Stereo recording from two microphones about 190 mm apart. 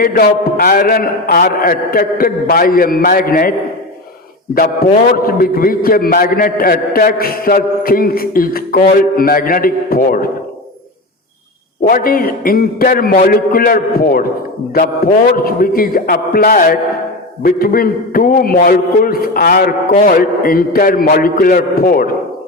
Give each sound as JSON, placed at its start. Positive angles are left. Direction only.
{"t": 0.0, "sound": "a man's voice", "side_deg": 50}
{"t": 4.5, "sound": "a man's voice", "side_deg": 50}
{"t": 11.9, "sound": "a man's voice", "side_deg": 50}